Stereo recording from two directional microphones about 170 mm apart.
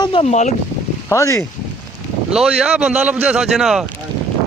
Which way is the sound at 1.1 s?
15° left (ahead or behind).